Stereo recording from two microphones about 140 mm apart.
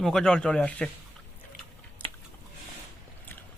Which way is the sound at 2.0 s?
15° left (ahead or behind).